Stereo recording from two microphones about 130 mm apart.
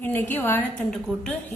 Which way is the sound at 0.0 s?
15° left (ahead or behind).